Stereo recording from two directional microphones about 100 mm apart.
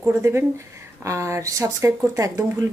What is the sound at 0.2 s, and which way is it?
A woman's voice, 25° right (ahead or behind).